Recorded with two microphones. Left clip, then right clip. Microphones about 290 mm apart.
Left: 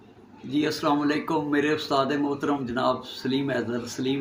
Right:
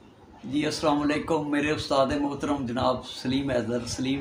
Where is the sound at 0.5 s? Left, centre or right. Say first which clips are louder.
Left 1 dB; centre.